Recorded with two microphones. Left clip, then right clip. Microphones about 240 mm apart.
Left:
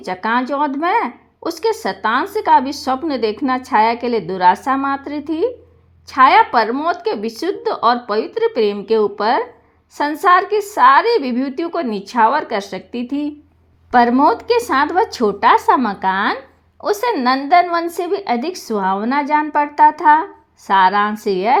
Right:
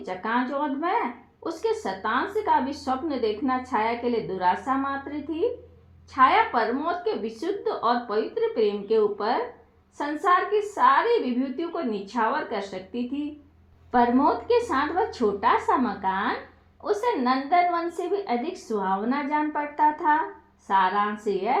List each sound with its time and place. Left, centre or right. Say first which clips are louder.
0.0 s speech: left 8 dB; left